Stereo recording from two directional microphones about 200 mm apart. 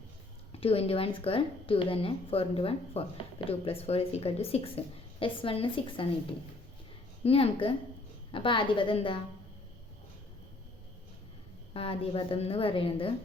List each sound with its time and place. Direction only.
0.6 s a woman's voice: 30° left (ahead or behind)
7.3 s a woman's voice: 30° left (ahead or behind)
11.7 s a woman's voice: 30° left (ahead or behind)